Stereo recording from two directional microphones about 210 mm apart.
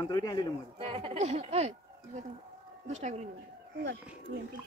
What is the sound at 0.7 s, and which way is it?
Speech, 25° right (ahead or behind).